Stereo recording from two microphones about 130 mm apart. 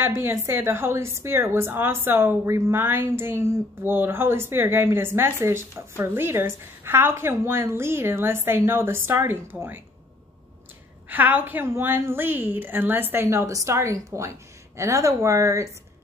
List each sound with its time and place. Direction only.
0.0 s a woman's voice: 20° right (ahead or behind)
11.1 s a woman's voice: 15° right (ahead or behind)